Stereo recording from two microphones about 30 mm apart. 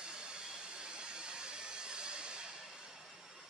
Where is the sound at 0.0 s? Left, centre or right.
Right.